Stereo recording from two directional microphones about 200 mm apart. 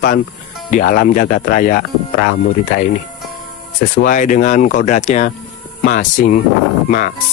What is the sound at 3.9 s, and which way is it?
Speech, 45° left (ahead or behind).